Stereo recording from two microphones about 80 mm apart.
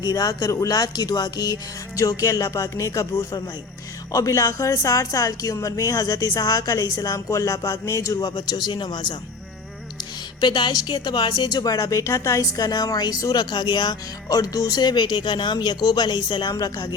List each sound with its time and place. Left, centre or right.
0.0 s speech: left
2.0 s speech: left
10.4 s speech: left